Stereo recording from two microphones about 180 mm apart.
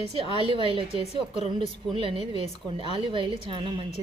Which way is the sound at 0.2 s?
30° right (ahead or behind).